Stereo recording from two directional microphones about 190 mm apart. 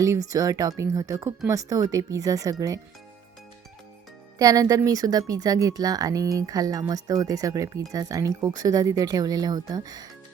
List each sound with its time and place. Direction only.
0.0 s speech: 15° right (ahead or behind)
4.4 s speech: 20° right (ahead or behind)